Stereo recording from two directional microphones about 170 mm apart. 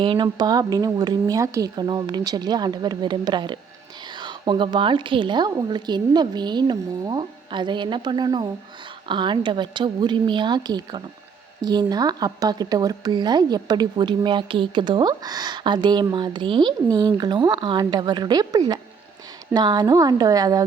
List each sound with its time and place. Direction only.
0.0 s speech: 30° right (ahead or behind)